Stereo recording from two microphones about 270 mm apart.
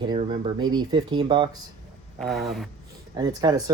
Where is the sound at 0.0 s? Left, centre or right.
Centre.